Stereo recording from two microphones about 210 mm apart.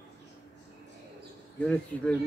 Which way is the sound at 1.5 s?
5° left (ahead or behind).